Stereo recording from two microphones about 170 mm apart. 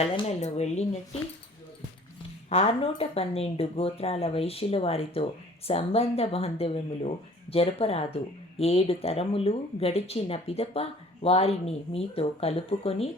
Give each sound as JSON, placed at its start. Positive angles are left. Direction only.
{"t": 0.0, "sound": "speech", "side_deg": 40}
{"t": 2.5, "sound": "speech", "side_deg": 35}